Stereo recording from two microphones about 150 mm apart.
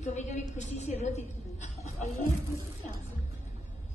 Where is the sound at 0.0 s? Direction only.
50° left (ahead or behind).